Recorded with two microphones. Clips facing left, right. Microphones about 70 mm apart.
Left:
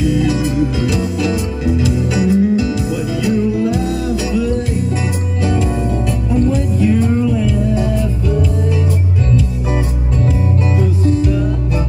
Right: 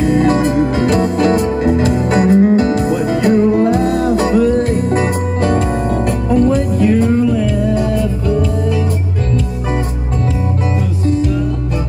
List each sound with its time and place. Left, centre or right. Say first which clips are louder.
0.0 s music: right 4 dB; right